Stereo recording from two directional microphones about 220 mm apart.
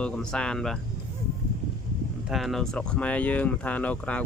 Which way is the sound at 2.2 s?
Centre (ahead or behind).